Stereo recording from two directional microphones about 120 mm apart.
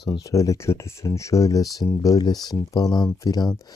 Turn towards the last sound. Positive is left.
turn(degrees=35)  # may be behind; listen again after turning